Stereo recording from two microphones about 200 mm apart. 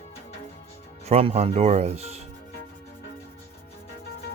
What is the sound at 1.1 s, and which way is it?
Speech, 30° right (ahead or behind).